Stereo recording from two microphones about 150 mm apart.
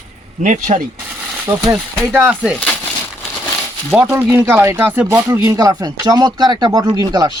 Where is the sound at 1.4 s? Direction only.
25° right (ahead or behind).